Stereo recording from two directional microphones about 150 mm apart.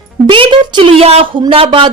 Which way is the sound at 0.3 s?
35° right (ahead or behind).